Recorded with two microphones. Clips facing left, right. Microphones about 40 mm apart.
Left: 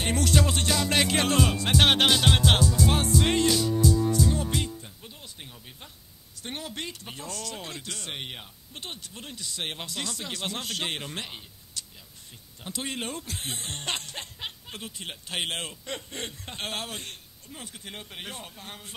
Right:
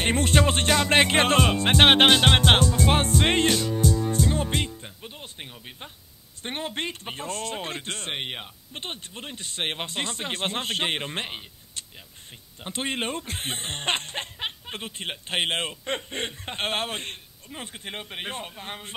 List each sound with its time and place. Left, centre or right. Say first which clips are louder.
0.0 s music: right 3 dB; right
6.4 s speech: right 5 dB; right